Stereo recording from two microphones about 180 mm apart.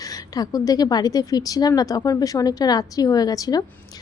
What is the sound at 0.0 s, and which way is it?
A woman's voice, 20° left (ahead or behind).